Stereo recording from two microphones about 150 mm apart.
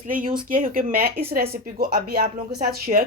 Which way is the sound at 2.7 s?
80° right.